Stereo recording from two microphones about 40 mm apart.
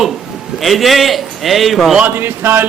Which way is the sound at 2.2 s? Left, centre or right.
Right.